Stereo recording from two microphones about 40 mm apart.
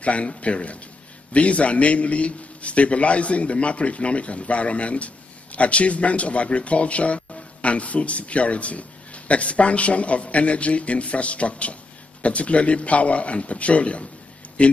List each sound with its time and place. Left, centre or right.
0.0 s a man's voice: left